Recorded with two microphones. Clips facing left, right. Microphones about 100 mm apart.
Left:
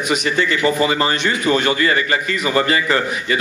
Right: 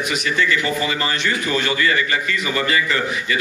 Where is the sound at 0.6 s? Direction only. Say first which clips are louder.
Left 6 dB; 35° left (ahead or behind).